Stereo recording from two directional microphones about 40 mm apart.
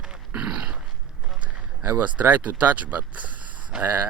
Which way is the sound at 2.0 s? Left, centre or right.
Right.